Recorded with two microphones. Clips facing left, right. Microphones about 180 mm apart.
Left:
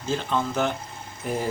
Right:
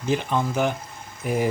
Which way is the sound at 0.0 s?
15° right (ahead or behind).